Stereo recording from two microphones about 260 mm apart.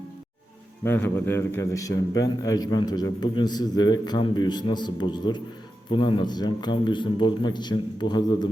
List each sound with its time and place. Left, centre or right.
0.9 s a man's voice: centre